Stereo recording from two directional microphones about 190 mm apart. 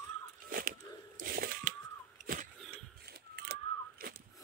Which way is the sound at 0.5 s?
50° right (ahead or behind).